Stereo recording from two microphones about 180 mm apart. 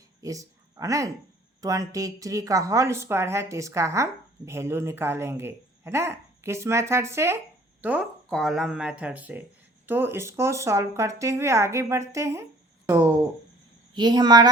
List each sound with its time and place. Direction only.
0.2 s speech: 20° right (ahead or behind)